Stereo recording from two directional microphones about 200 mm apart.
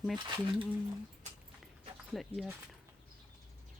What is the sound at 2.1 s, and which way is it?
Speech, centre (ahead or behind).